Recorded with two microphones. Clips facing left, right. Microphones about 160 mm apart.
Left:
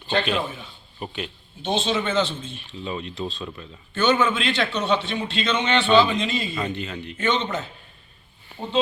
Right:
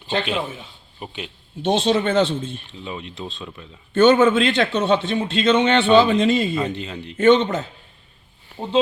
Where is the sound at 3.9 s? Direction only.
50° right (ahead or behind).